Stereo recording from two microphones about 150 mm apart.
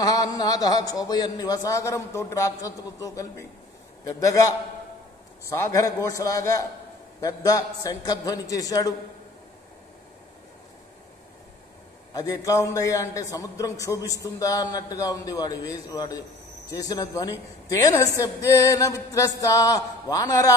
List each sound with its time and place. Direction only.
0.0 s a man's voice: 25° left (ahead or behind)
5.5 s a man's voice: 20° left (ahead or behind)
12.1 s a man's voice: 25° left (ahead or behind)